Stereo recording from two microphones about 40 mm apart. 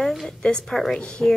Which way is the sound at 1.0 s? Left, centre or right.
Left.